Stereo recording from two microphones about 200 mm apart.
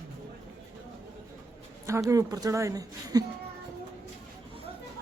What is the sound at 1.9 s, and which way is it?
Speech, 15° right (ahead or behind).